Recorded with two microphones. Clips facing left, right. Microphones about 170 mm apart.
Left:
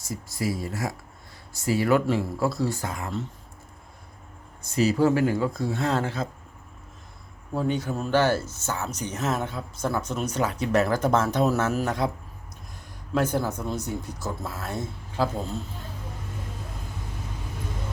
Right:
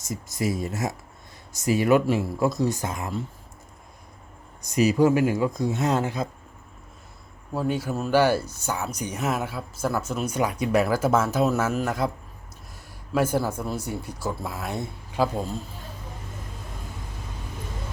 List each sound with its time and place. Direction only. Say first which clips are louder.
0.0 s speech: right 2 dB; 20° right (ahead or behind)
4.6 s speech: right 2 dB; 15° right (ahead or behind)
7.5 s speech: even; 5° right (ahead or behind)
13.1 s speech: right 1 dB; 10° right (ahead or behind)